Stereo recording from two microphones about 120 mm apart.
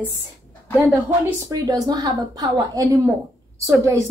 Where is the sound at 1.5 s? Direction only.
30° right (ahead or behind).